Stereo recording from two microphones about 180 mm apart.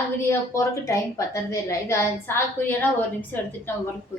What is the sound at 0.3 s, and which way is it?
A woman's voice, 15° left (ahead or behind).